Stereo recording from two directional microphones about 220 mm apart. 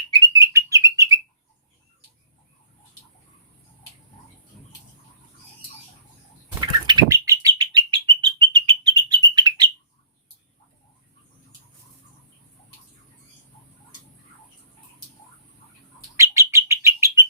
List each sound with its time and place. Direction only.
0.1 s bird: 15° right (ahead or behind)
6.6 s bird: 20° right (ahead or behind)
16.1 s bird: 15° right (ahead or behind)